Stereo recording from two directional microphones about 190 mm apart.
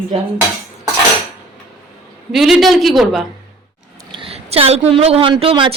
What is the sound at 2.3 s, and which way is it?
Speech, centre (ahead or behind).